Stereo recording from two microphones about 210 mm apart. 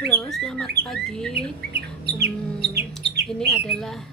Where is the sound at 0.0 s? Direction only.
Centre (ahead or behind).